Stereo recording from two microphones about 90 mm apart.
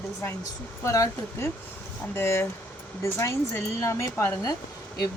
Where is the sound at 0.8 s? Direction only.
35° left (ahead or behind).